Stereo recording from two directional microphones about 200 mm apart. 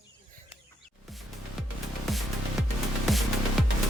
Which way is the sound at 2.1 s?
Centre (ahead or behind).